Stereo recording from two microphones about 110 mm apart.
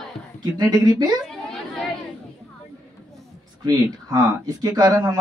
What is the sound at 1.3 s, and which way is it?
Chatter, 5° left (ahead or behind).